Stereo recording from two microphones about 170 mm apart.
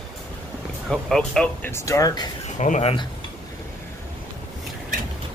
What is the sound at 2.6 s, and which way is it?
Speech, 40° left (ahead or behind).